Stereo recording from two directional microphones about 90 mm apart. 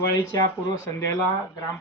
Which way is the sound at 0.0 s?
35° left (ahead or behind).